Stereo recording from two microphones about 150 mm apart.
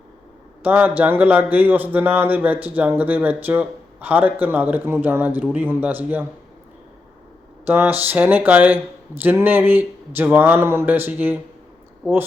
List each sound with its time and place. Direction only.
0.6 s a man's voice: 10° right (ahead or behind)
7.7 s a man's voice: 15° right (ahead or behind)